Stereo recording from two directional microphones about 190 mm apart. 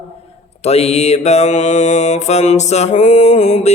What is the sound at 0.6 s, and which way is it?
Mantra, 35° left (ahead or behind).